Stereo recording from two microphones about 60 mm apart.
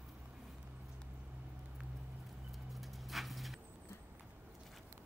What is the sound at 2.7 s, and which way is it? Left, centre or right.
Dog, centre.